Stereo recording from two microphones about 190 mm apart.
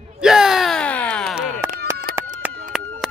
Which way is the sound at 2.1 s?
50° left (ahead or behind).